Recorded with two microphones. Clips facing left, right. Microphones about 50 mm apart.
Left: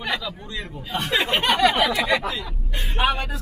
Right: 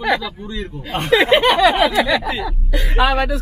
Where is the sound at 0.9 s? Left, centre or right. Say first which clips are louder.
Right 9 dB; right.